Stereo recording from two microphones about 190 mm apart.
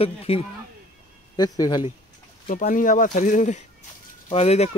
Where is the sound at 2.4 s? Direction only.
45° left (ahead or behind).